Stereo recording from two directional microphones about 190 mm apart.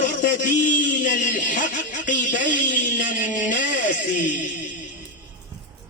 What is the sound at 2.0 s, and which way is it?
A man's voice, 45° left (ahead or behind).